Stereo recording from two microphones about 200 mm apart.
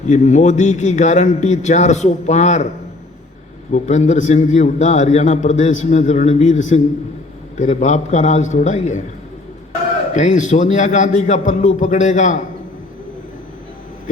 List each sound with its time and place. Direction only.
0.1 s a man's voice: 35° left (ahead or behind)
3.7 s a man's voice: 35° left (ahead or behind)
10.2 s a man's voice: 40° left (ahead or behind)